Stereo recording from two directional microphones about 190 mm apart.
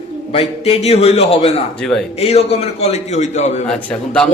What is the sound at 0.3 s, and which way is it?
A man's voice, 30° left (ahead or behind).